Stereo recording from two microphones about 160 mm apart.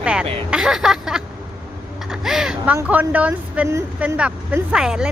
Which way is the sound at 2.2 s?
5° right (ahead or behind).